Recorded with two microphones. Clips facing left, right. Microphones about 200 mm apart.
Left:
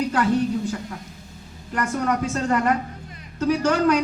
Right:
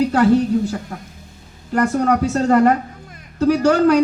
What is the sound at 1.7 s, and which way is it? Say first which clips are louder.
A man's voice: right 7 dB; 40° right (ahead or behind).